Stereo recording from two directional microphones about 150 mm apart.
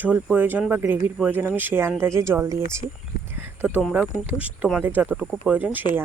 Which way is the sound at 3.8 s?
5° right (ahead or behind).